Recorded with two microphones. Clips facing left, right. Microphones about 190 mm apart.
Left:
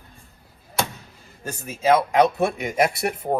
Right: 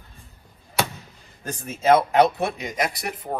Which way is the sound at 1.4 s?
10° left (ahead or behind).